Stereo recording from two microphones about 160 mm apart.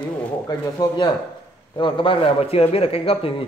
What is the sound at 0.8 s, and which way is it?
A man's voice, 30° left (ahead or behind).